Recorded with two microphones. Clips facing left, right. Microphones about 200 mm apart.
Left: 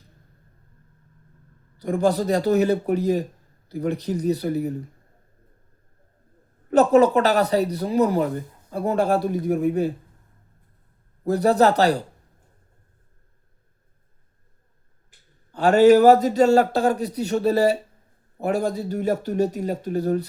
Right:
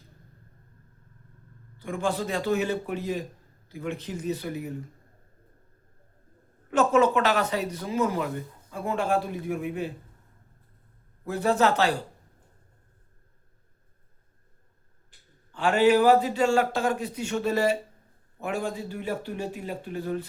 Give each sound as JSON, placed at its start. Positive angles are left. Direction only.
{"t": 1.8, "sound": "speech", "side_deg": 40}
{"t": 6.7, "sound": "speech", "side_deg": 40}
{"t": 11.2, "sound": "speech", "side_deg": 40}
{"t": 15.5, "sound": "speech", "side_deg": 40}